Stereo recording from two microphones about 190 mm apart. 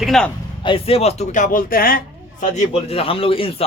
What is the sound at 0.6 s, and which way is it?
A man's voice, 30° left (ahead or behind).